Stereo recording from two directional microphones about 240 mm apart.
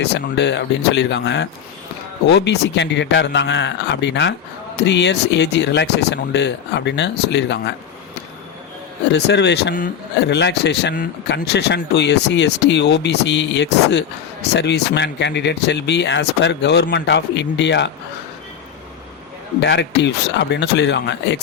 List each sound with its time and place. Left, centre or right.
0.0 s speech: left
9.1 s speech: left
19.6 s speech: left